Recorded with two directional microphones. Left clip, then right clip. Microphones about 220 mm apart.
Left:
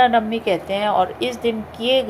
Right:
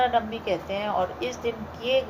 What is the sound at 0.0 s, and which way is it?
A woman's voice, 40° left (ahead or behind).